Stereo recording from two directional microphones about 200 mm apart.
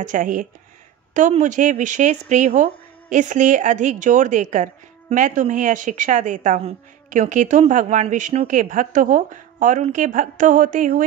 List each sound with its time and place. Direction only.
0.0 s a woman's voice: 40° right (ahead or behind)